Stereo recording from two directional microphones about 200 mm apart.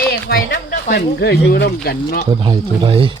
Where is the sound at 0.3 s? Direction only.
45° left (ahead or behind).